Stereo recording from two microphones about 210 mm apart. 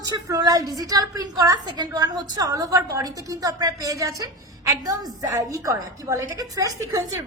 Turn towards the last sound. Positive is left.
turn(degrees=-15)  # may be behind; listen again after turning